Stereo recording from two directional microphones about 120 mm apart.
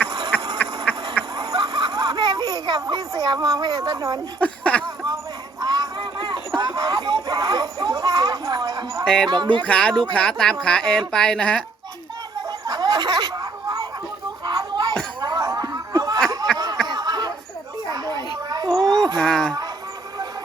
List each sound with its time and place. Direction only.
1.4 s a sound: 35° right (ahead or behind)
4.4 s speech: 10° left (ahead or behind)
4.8 s a sound: 35° right (ahead or behind)
9.0 s speech: 5° left (ahead or behind)
9.3 s speech: 40° right (ahead or behind)
9.6 s speech: 10° left (ahead or behind)
9.9 s speech: 40° right (ahead or behind)
10.2 s speech: 5° left (ahead or behind)
12.5 s a sound: 35° right (ahead or behind)
15.2 s snicker: 35° right (ahead or behind)
17.8 s children playing: 35° right (ahead or behind)
18.8 s a sound: 35° right (ahead or behind)
19.2 s speech: 5° left (ahead or behind)